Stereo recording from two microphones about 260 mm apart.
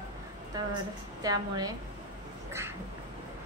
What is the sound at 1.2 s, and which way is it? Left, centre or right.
Speech, centre.